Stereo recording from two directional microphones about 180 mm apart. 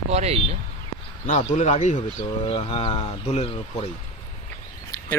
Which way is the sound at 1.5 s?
40° left (ahead or behind).